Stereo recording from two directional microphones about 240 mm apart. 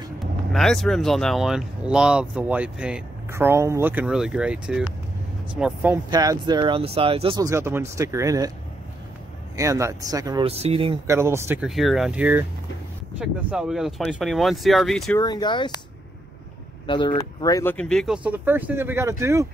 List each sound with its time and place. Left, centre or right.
0.2 s speech: centre
9.6 s speech: centre
11.1 s speech: centre
15.1 s speech: centre
16.8 s speech: centre